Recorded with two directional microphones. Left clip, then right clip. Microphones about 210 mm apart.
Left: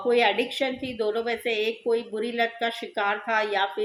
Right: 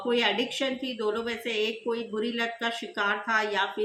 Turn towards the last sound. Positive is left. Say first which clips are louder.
# left 2 dB
turn(degrees=-15)  # may be behind; listen again after turning